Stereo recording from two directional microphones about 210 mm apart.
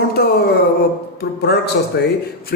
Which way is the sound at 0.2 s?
50° left (ahead or behind).